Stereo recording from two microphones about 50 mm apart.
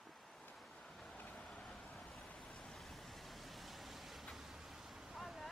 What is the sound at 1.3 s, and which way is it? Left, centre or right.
Vehicle, centre.